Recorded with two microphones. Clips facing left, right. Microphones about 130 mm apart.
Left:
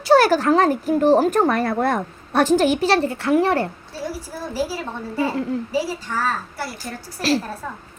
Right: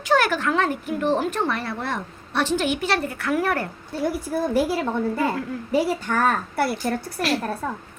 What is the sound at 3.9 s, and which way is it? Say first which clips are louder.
A woman's voice: right 5 dB; 60° right (ahead or behind).